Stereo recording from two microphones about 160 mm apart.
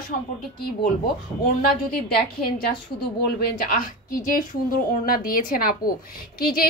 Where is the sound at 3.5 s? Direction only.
60° left (ahead or behind).